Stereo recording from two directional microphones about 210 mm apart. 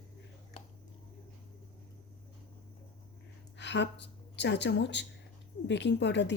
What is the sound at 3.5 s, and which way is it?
A woman's voice, 55° left (ahead or behind).